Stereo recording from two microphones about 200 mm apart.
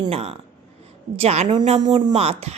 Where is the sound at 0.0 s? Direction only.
30° right (ahead or behind).